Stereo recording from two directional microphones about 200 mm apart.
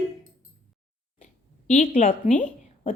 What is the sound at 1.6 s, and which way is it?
Speech, 40° left (ahead or behind).